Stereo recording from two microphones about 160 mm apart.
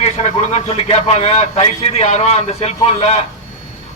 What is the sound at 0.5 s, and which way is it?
A man's voice, 40° left (ahead or behind).